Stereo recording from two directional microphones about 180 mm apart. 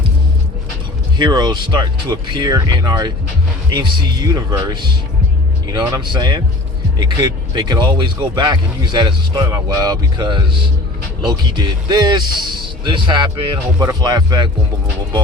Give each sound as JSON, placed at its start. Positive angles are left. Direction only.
{"t": 1.2, "sound": "speech", "side_deg": -25}